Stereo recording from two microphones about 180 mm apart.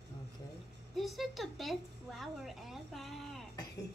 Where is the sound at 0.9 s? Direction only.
Centre (ahead or behind).